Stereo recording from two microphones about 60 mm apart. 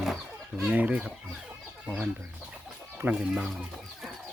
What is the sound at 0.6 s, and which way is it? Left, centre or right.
Speech, right.